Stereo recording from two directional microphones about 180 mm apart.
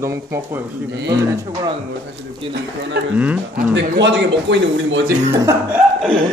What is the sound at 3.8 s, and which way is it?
Speech, 75° right (ahead or behind).